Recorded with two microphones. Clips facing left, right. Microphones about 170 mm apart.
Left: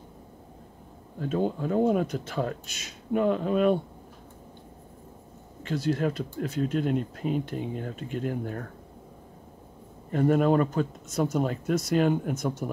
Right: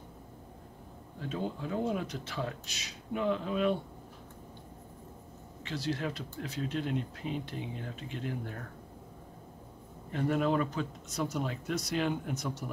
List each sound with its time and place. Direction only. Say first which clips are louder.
1.3 s speech: left 9 dB; 50° left (ahead or behind)
5.6 s speech: left 8 dB; 50° left (ahead or behind)
10.1 s speech: left 7 dB; 50° left (ahead or behind)